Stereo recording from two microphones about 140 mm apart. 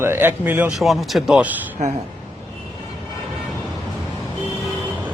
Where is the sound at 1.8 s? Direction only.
55° right (ahead or behind).